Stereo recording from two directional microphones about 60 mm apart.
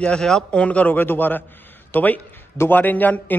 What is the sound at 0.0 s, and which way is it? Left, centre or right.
Speech, centre.